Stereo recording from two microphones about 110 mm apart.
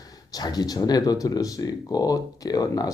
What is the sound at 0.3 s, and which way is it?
A man's voice, 35° left (ahead or behind).